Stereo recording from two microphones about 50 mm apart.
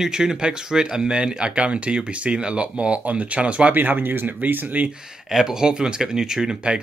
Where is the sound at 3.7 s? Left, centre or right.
Right.